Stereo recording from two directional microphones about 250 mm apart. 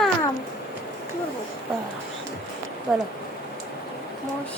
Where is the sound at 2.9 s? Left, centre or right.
Centre.